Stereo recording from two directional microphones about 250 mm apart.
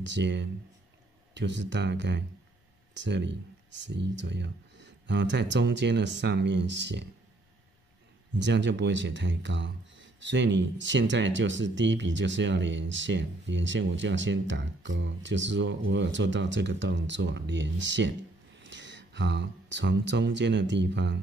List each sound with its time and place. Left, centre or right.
0.0 s speech: right
8.4 s speech: right